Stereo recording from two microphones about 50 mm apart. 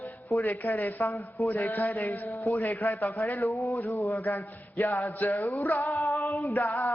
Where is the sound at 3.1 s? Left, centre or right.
Left.